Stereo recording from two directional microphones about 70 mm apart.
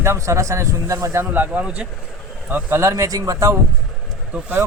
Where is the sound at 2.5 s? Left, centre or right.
Right.